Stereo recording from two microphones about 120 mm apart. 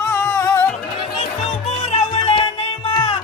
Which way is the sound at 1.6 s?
65° left (ahead or behind).